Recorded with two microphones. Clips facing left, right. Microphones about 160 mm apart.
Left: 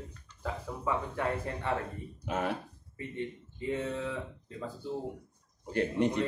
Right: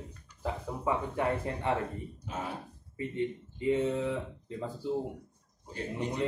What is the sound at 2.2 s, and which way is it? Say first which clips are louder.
Speech: left 6 dB; 70° left (ahead or behind).